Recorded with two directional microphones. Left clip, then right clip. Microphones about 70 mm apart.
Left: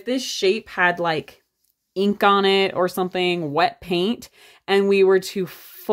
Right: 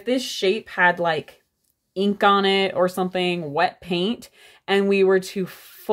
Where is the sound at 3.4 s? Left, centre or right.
Left.